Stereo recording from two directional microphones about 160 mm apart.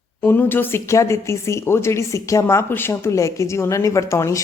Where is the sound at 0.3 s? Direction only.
15° left (ahead or behind).